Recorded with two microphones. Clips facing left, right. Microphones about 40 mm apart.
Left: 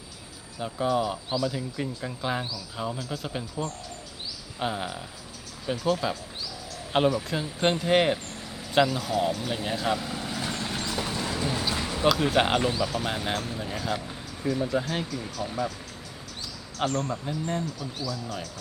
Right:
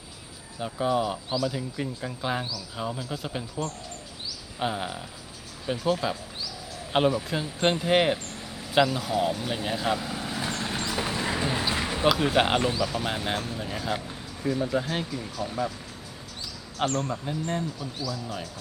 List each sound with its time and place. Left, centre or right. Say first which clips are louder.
0.6 s speech: even; centre
4.6 s speech: right 1 dB; centre
10.8 s a sound: right 3 dB; centre
12.0 s speech: even; centre
17.0 s speech: even; centre